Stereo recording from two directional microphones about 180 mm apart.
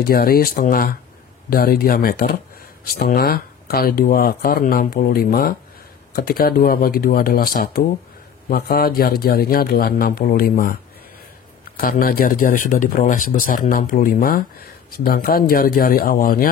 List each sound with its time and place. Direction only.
0.0 s speech: 55° left (ahead or behind)
11.8 s speech: 55° left (ahead or behind)